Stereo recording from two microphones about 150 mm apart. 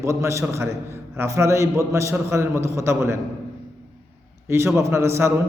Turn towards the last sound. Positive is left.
turn(degrees=-15)  # may be behind; listen again after turning